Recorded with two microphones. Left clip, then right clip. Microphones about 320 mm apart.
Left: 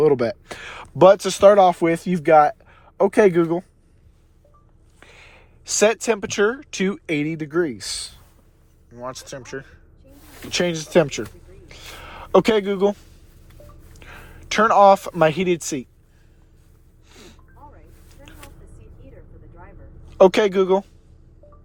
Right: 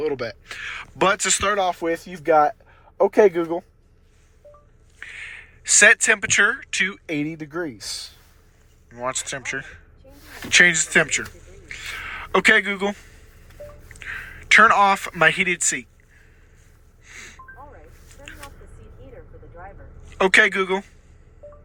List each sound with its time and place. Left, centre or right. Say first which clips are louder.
0.0 s speech: left 8 dB; centre
4.9 s speech: right 11 dB; centre
7.3 s speech: left 7 dB; left
8.9 s speech: right 5 dB; centre
10.8 s a man's voice: left 1 dB; centre
11.7 s a sound: right 7 dB; centre
14.0 s speech: right 10 dB; centre
20.1 s a man's voice: left 2 dB; centre